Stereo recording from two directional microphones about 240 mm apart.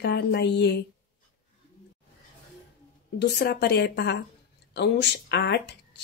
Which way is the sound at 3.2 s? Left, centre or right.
Left.